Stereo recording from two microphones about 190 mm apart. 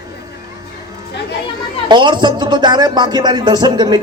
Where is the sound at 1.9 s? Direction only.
25° right (ahead or behind).